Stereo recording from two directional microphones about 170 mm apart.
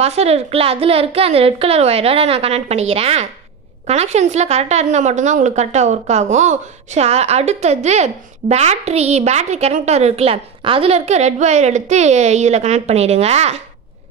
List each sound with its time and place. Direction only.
0.0 s a woman's voice: 40° right (ahead or behind)